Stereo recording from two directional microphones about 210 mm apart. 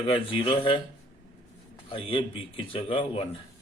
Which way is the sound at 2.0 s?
25° left (ahead or behind).